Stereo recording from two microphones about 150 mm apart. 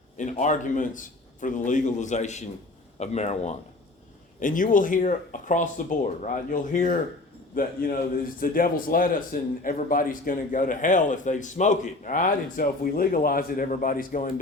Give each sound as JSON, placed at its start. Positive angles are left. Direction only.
{"t": 0.2, "sound": "a man's voice", "side_deg": 55}
{"t": 4.4, "sound": "a man's voice", "side_deg": 60}